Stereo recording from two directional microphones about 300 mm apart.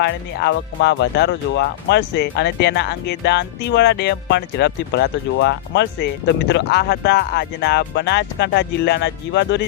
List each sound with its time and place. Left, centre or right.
0.0 s speech: left